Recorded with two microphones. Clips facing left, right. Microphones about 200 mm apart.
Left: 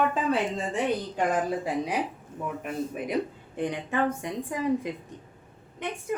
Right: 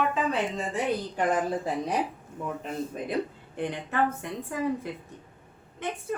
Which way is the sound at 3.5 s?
15° left (ahead or behind).